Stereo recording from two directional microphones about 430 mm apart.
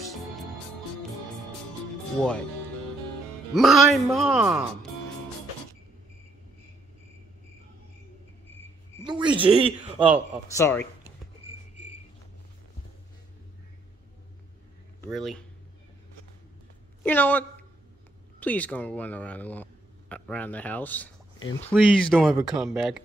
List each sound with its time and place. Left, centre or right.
0.0 s music: centre
2.1 s speech: centre
3.5 s speech: centre
8.5 s cricket: centre
9.0 s a sound: centre
10.5 s speech: centre
15.0 s speech: centre
17.0 s a woman's voice: centre